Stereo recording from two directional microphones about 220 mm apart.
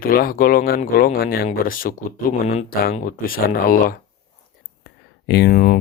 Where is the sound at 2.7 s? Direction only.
40° left (ahead or behind).